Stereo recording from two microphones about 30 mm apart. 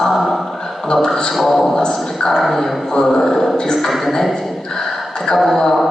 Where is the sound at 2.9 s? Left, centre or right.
Centre.